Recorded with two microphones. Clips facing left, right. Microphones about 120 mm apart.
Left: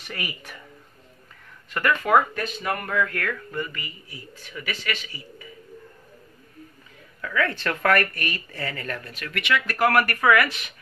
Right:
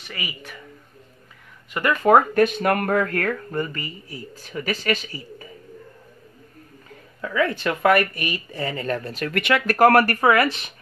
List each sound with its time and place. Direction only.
0.0 s speech: centre (ahead or behind)
1.8 s speech: 20° right (ahead or behind)
2.3 s speech: 60° right (ahead or behind); by 5.5 s 40° right (ahead or behind)
7.2 s speech: 20° right (ahead or behind)